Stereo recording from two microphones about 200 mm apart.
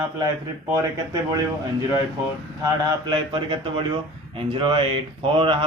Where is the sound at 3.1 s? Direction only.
25° right (ahead or behind).